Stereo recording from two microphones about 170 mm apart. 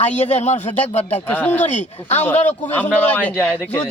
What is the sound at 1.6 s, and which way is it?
A man's voice, 45° left (ahead or behind).